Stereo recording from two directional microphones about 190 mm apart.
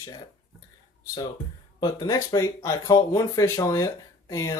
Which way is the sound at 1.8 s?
20° left (ahead or behind).